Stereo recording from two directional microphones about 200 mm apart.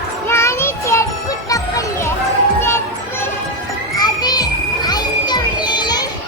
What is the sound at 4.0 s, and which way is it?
Children playing, 20° left (ahead or behind).